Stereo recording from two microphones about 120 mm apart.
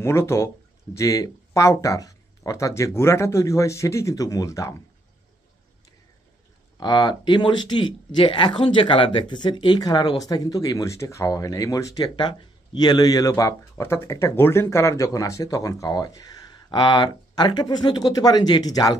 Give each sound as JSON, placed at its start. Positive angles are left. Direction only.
{"t": 0.0, "sound": "speech", "side_deg": 20}
{"t": 6.8, "sound": "speech", "side_deg": 35}